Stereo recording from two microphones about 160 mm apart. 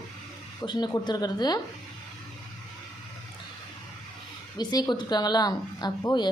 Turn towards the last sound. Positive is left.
turn(degrees=25)  # may be behind; listen again after turning